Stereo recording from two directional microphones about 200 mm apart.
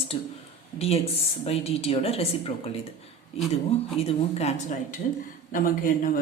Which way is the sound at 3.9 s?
30° left (ahead or behind).